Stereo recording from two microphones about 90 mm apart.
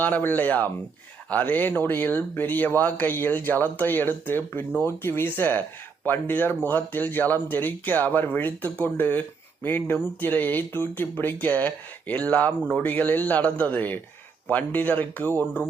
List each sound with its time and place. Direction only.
0.0 s speech: 20° left (ahead or behind)